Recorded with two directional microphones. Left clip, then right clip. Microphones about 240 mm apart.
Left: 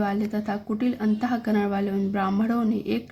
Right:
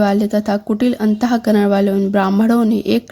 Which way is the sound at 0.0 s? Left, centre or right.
Right.